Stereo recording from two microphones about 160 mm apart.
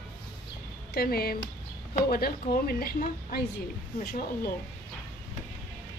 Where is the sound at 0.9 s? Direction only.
70° left (ahead or behind).